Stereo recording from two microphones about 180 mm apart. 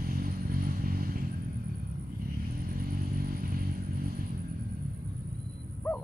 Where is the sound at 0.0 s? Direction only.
55° right (ahead or behind).